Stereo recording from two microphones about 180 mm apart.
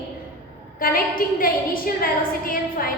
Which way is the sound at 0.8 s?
55° left (ahead or behind).